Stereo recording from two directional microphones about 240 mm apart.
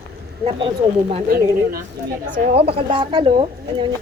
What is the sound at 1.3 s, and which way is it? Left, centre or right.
Speech, right.